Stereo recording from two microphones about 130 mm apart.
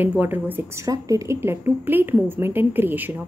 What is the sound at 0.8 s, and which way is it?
A woman's voice, 25° right (ahead or behind).